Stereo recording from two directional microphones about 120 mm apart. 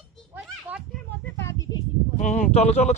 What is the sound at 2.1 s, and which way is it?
Speech, 90° left.